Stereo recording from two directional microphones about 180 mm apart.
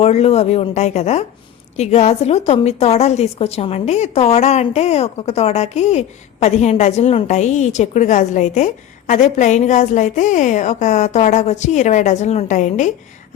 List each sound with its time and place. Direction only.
0.0 s a woman's voice: 35° left (ahead or behind)